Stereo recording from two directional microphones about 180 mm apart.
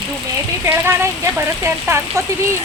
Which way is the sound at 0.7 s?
15° right (ahead or behind).